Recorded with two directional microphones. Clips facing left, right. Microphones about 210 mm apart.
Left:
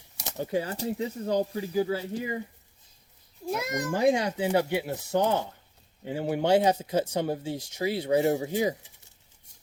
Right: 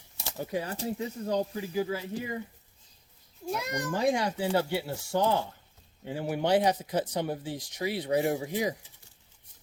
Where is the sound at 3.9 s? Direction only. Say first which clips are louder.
Left 3 dB; 25° left (ahead or behind).